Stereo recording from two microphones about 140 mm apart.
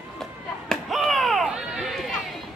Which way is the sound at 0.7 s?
Centre (ahead or behind).